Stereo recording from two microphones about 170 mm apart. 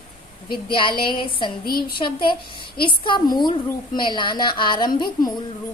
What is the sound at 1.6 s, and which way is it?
Speech, 60° left (ahead or behind).